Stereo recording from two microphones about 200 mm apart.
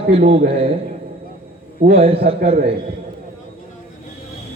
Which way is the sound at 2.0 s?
30° right (ahead or behind).